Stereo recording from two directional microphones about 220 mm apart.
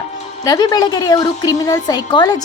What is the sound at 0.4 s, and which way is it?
A woman's voice, 15° left (ahead or behind).